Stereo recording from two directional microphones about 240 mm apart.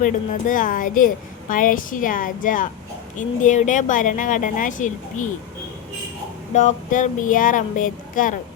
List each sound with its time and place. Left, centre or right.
0.0 s a woman's voice: left
6.5 s a woman's voice: left